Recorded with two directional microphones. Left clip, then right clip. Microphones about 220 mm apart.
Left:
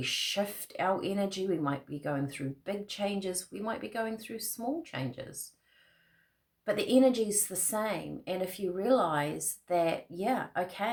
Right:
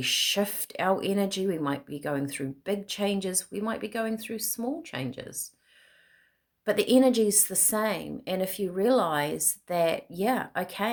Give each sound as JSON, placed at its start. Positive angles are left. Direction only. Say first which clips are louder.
{"t": 0.0, "sound": "speech", "louder": "right 6 dB", "side_deg": -45}
{"t": 6.7, "sound": "speech", "louder": "right 4 dB", "side_deg": -45}